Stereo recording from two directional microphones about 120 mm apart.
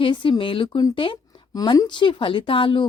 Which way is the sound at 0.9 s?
45° left (ahead or behind).